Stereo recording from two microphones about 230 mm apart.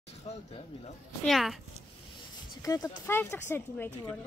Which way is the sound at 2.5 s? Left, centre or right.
Centre.